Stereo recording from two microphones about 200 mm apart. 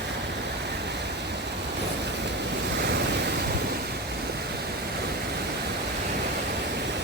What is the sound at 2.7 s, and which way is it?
Waves, 55° right (ahead or behind).